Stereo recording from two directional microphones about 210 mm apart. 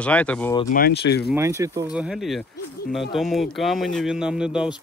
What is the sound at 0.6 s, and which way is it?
Speech, 45° left (ahead or behind).